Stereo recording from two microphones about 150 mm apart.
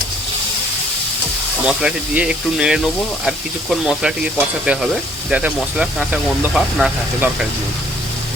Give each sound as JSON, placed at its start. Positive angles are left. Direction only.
{"t": 1.6, "sound": "speech", "side_deg": -5}